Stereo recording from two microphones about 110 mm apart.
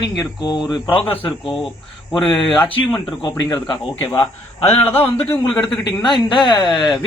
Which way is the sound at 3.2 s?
40° left (ahead or behind).